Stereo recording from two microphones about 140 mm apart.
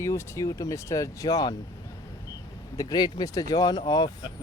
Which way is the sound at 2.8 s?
30° left (ahead or behind).